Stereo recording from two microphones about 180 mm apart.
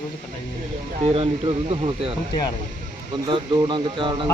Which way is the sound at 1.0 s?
30° right (ahead or behind).